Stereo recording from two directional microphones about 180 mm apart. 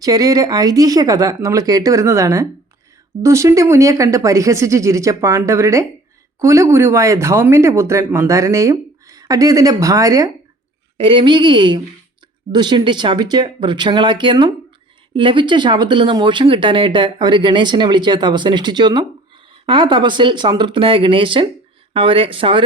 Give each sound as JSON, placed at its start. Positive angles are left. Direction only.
{"t": 0.0, "sound": "speech", "side_deg": -20}
{"t": 10.9, "sound": "speech", "side_deg": -30}